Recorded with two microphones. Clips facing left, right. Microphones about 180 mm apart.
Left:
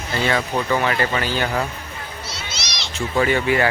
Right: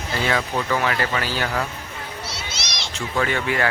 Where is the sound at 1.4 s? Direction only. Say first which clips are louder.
Left 2 dB; 15° left (ahead or behind).